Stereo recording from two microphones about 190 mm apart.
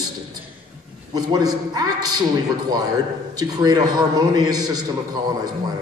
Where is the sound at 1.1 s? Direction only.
20° right (ahead or behind).